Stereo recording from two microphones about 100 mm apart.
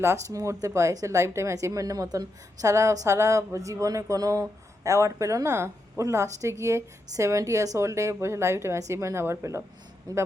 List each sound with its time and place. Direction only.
0.0 s speech: 30° right (ahead or behind)
10.1 s speech: 40° right (ahead or behind)